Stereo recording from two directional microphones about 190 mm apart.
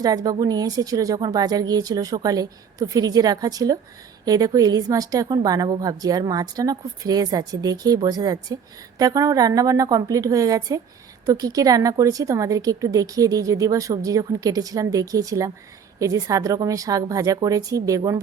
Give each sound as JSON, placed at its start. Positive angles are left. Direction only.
{"t": 0.0, "sound": "a woman's voice", "side_deg": -20}